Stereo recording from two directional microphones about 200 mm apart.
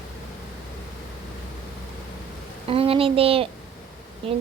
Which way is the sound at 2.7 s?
30° right (ahead or behind).